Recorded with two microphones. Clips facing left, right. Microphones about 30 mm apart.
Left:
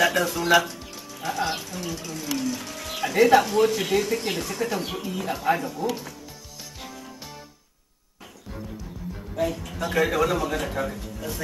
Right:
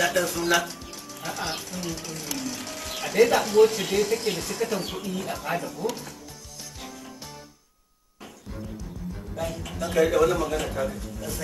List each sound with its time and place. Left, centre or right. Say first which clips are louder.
0.0 s speech: left 2 dB; centre
6.8 s music: left 1 dB; centre
9.1 s music: left 6 dB; centre
9.8 s a man's voice: right 2 dB; centre